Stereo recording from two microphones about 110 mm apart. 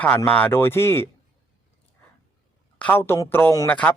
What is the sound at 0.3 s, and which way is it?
Speech, 15° left (ahead or behind).